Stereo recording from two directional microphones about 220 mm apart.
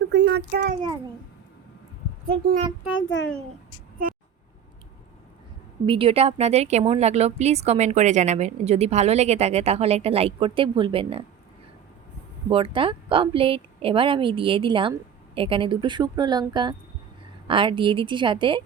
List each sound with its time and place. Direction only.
0.1 s a sound: 50° right (ahead or behind)
2.2 s speech: 40° right (ahead or behind)
3.1 s a child's voice: 60° left (ahead or behind)
4.0 s speech: 40° right (ahead or behind)
5.8 s a woman's voice: 25° right (ahead or behind)
12.5 s a woman's voice: 25° right (ahead or behind)